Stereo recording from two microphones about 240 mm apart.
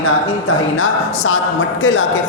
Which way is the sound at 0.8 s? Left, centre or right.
Left.